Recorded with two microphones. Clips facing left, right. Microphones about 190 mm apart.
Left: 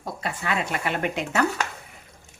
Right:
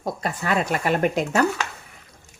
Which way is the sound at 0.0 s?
45° right (ahead or behind).